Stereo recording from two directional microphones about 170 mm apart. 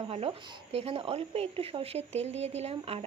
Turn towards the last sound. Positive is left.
turn(degrees=-35)  # may be behind; listen again after turning